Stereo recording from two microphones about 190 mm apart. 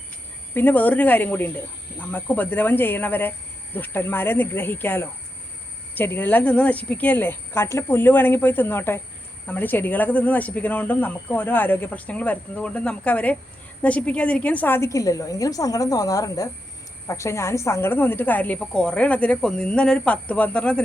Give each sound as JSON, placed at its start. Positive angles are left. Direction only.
{"t": 0.5, "sound": "speech", "side_deg": 10}